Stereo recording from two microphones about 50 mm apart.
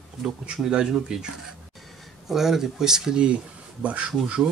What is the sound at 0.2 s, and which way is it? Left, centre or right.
Speech, centre.